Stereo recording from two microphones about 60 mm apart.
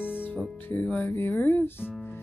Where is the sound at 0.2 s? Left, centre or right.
Left.